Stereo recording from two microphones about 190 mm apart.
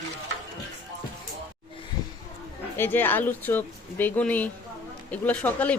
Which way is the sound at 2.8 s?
10° left (ahead or behind).